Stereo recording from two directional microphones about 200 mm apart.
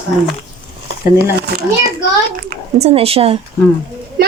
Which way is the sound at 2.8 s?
30° right (ahead or behind).